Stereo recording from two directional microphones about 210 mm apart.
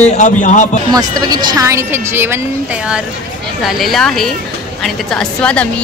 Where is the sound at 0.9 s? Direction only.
20° right (ahead or behind).